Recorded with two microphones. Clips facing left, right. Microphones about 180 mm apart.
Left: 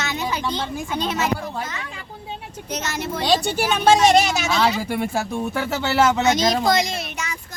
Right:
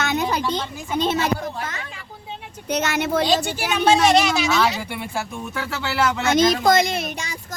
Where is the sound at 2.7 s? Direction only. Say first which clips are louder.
Right 5 dB; 60° right (ahead or behind).